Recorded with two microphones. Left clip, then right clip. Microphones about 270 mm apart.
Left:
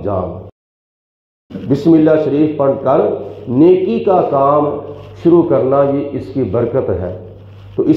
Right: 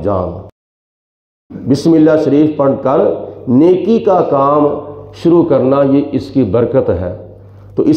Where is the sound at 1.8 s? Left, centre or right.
Right.